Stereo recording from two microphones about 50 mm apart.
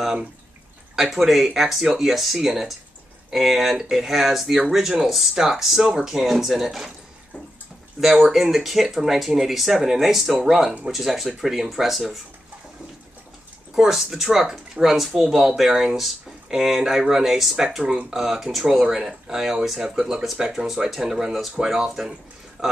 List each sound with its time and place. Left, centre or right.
0.9 s speech: centre
8.0 s speech: centre
13.7 s speech: centre
22.6 s a sound: centre